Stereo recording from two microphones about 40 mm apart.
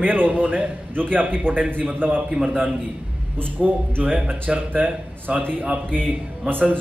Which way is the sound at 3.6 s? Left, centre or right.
Right.